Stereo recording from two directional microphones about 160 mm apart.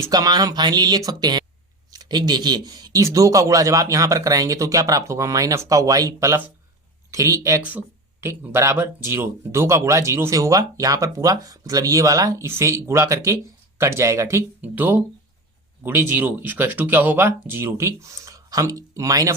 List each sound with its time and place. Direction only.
0.0 s speech: 25° right (ahead or behind)